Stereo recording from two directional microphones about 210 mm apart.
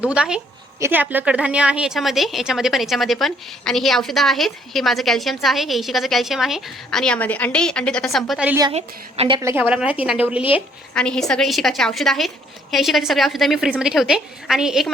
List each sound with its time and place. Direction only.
0.0 s a woman's voice: 5° right (ahead or behind)
8.7 s a woman's voice: 25° right (ahead or behind)
9.4 s a woman's voice: 10° right (ahead or behind)
10.9 s a woman's voice: 5° left (ahead or behind)